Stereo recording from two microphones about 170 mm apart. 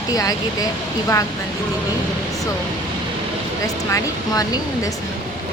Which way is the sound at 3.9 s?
20° left (ahead or behind).